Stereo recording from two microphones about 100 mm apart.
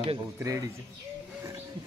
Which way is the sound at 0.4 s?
35° right (ahead or behind).